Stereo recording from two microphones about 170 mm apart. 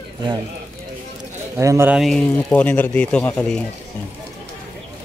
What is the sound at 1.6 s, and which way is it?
Speech, 15° right (ahead or behind).